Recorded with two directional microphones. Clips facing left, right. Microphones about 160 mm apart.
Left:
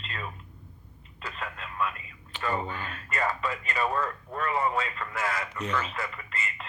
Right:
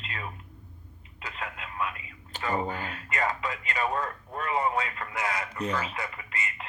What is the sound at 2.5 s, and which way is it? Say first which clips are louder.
Speech: right 2 dB; 45° right (ahead or behind).